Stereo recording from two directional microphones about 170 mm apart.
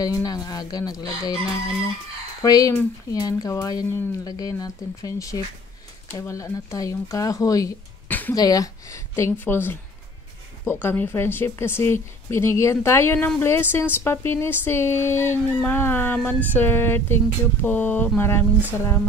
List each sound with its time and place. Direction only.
0.0 s speech: 20° left (ahead or behind)
2.4 s speech: 20° left (ahead or behind)